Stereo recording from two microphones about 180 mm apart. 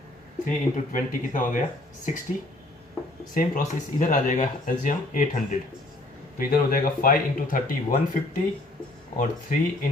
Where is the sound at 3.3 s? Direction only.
45° left (ahead or behind).